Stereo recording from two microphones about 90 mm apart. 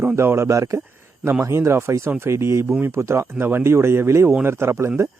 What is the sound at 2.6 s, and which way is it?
Speech, 15° right (ahead or behind).